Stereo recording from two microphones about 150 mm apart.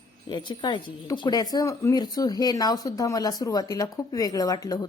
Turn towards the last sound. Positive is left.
turn(degrees=25)  # may be behind; listen again after turning